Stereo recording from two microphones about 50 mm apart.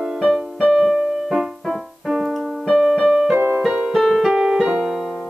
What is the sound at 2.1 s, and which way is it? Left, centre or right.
Keyboard, centre.